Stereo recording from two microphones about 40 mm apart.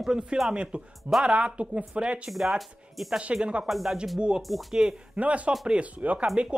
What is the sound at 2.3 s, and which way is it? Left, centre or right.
Speech, centre.